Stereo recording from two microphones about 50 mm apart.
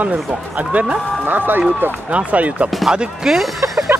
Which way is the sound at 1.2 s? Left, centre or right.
Right.